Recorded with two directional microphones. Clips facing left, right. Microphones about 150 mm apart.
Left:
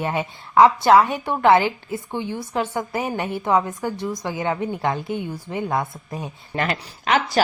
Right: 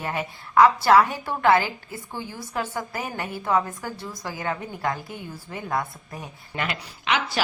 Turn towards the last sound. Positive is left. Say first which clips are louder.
# left 6 dB
turn(degrees=45)  # may be behind; listen again after turning